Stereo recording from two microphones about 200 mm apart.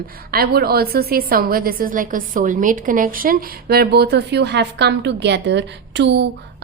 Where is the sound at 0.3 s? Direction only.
50° right (ahead or behind).